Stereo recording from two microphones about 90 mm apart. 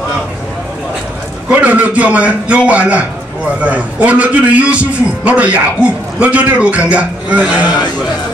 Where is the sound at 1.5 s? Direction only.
15° right (ahead or behind).